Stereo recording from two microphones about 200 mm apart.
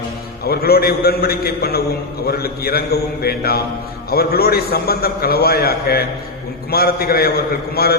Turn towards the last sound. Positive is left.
turn(degrees=50)  # may be behind; listen again after turning